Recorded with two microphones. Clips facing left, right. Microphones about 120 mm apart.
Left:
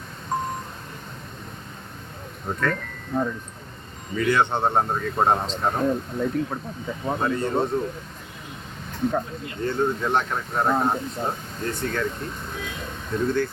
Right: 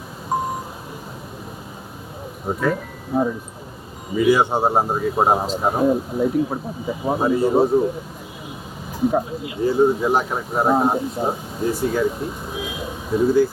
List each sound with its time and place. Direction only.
0.3 s vehicle: 5° right (ahead or behind)
2.5 s speech: 10° right (ahead or behind)
8.9 s a sound: 5° right (ahead or behind)
9.4 s speech: 10° right (ahead or behind)